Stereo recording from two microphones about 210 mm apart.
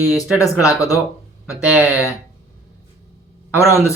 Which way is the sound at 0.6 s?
15° left (ahead or behind).